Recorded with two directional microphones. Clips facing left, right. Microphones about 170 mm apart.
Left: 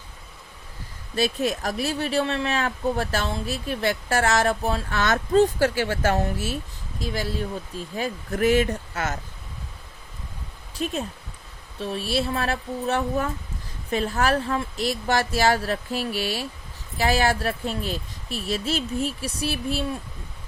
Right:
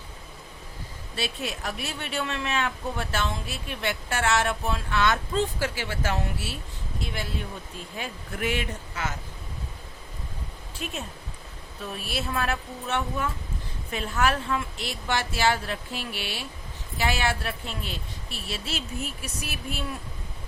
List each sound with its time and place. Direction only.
1.1 s speech: 40° left (ahead or behind)
10.8 s speech: 35° left (ahead or behind)